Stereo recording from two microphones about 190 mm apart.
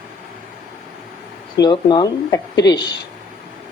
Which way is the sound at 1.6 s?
25° left (ahead or behind).